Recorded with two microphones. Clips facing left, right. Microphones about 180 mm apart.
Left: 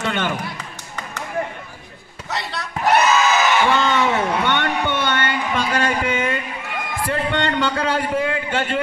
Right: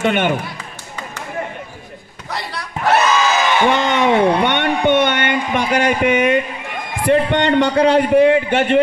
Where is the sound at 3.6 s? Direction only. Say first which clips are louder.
Right 3 dB; 20° right (ahead or behind).